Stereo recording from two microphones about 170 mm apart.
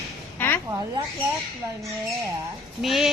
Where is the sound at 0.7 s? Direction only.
20° right (ahead or behind).